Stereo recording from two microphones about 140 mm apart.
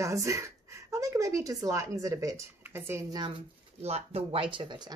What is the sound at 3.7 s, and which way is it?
Speech, 50° right (ahead or behind).